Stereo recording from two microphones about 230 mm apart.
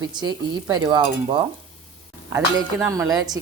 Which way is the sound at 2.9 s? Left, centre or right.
Centre.